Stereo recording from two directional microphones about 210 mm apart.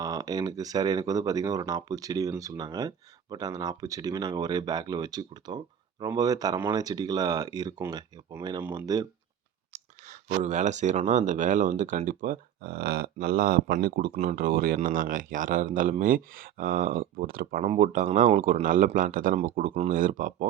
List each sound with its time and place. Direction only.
0.0 s speech: 15° right (ahead or behind)
9.7 s speech: 35° right (ahead or behind)